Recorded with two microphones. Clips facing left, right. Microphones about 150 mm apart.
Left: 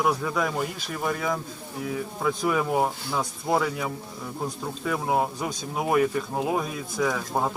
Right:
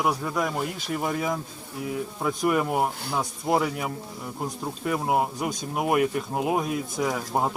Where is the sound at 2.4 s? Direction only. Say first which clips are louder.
Right 1 dB; 5° right (ahead or behind).